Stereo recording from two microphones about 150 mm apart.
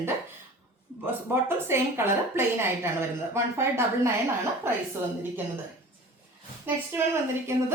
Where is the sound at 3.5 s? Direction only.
20° right (ahead or behind).